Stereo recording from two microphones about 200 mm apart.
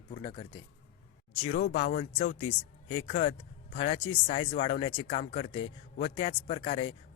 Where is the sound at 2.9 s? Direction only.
25° left (ahead or behind).